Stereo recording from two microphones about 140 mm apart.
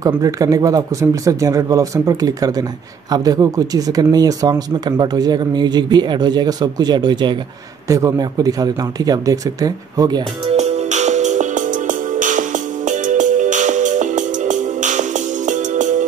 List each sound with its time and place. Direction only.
0.0 s speech: 25° right (ahead or behind)
10.5 s music: 50° right (ahead or behind)